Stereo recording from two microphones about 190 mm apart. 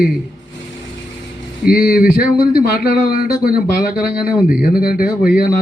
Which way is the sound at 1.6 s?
50° left (ahead or behind).